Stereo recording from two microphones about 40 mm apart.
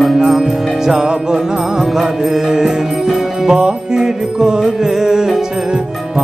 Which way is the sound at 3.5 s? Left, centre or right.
Centre.